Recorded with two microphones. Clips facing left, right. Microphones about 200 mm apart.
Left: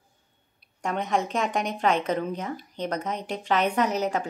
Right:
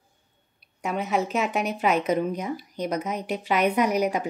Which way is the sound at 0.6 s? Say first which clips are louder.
Right 1 dB; 5° right (ahead or behind).